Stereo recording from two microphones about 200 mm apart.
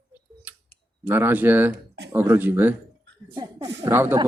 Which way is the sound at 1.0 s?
10° right (ahead or behind).